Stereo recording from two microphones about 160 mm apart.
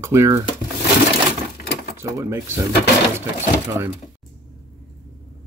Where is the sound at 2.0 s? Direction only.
20° right (ahead or behind).